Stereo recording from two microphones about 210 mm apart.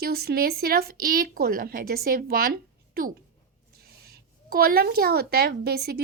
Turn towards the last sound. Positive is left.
turn(degrees=-50)  # may be behind; listen again after turning